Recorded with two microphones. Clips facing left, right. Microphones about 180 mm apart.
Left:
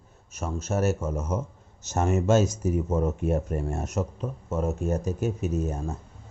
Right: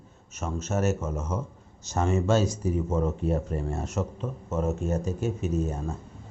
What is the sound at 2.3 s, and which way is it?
Speech, 45° left (ahead or behind).